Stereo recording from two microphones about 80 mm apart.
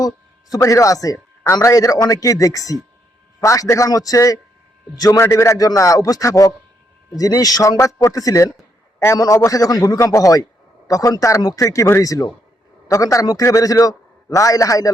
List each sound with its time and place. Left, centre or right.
0.6 s a man's voice: left
5.2 s a man's voice: left